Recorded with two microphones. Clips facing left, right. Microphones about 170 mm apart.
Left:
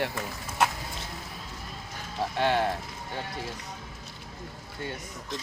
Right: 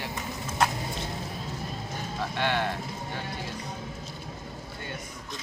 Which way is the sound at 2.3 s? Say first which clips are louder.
Left 3 dB; 35° left (ahead or behind).